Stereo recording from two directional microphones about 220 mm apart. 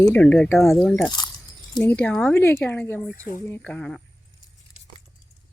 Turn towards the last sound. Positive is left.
turn(degrees=5)  # may be behind; listen again after turning